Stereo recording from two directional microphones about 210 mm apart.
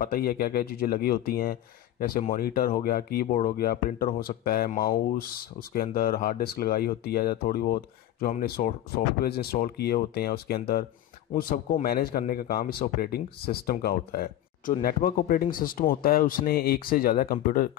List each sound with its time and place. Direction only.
0.0 s speech: 45° left (ahead or behind)